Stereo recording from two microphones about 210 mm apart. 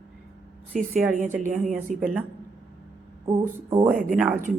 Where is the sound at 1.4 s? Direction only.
35° right (ahead or behind).